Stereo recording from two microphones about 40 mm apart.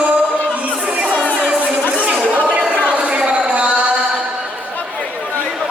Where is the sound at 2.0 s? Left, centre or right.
Right.